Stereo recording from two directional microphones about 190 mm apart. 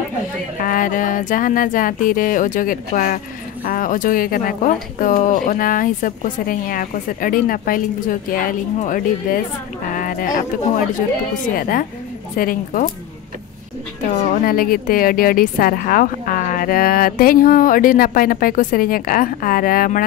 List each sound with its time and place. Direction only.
0.6 s speech: 45° left (ahead or behind)
14.4 s speech: 50° left (ahead or behind)